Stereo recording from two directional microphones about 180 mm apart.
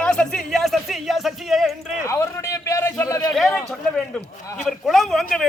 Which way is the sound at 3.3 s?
Centre (ahead or behind).